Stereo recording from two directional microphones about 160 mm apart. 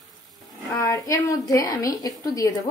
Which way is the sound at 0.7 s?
20° left (ahead or behind).